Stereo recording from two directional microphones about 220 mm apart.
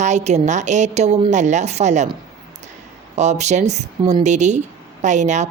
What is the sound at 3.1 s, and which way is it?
Speech, 30° right (ahead or behind).